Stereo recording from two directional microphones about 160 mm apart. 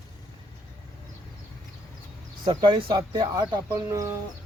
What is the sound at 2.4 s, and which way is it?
Speech, 30° right (ahead or behind).